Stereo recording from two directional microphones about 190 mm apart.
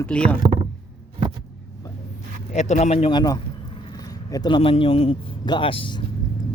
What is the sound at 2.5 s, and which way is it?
Speech, 40° left (ahead or behind).